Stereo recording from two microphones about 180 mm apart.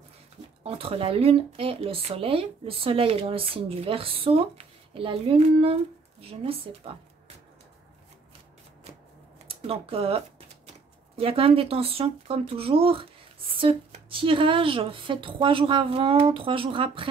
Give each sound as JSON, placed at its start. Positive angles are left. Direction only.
{"t": 0.7, "sound": "speech", "side_deg": -30}
{"t": 9.5, "sound": "speech", "side_deg": -35}